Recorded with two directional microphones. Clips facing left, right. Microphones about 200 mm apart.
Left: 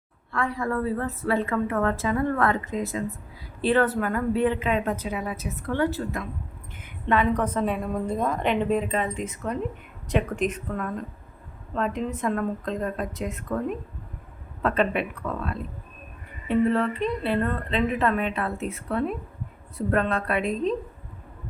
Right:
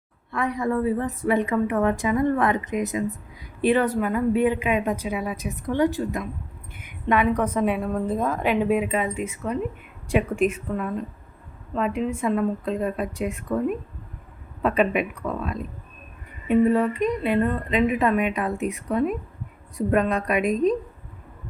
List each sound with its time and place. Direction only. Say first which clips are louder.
0.3 s a woman's voice: right 3 dB; 20° right (ahead or behind)